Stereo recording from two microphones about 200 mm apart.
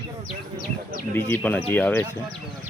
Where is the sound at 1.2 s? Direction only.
10° left (ahead or behind).